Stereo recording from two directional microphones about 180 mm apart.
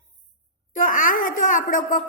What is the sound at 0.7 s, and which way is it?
A woman's voice, 45° left (ahead or behind).